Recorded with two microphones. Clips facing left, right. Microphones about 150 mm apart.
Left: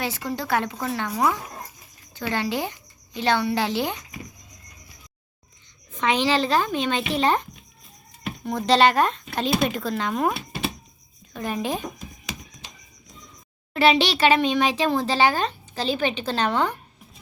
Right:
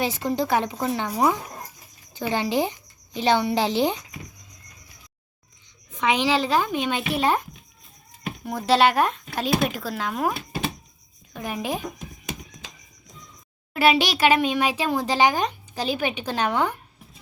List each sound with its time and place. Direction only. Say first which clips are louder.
0.0 s a woman's voice: right 4 dB; 20° right (ahead or behind)
5.9 s a child's voice: even; 10° right (ahead or behind)
8.4 s a child's voice: left 1 dB; 10° right (ahead or behind)
11.3 s a child's voice: left 2 dB; 10° right (ahead or behind)
13.7 s a child's voice: left 1 dB; 10° right (ahead or behind)